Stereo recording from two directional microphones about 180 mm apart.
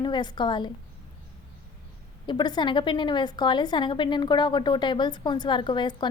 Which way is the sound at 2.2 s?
25° left (ahead or behind).